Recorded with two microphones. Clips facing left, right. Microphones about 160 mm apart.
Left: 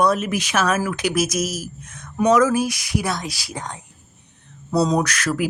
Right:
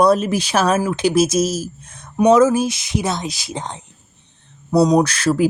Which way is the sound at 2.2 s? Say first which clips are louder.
Right 4 dB; 25° right (ahead or behind).